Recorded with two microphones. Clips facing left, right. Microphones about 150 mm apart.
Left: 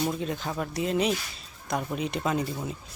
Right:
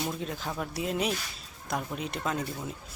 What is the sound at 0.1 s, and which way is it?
Speech, centre (ahead or behind).